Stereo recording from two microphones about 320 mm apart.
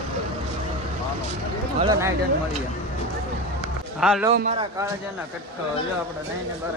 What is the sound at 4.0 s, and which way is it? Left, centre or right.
Speech, centre.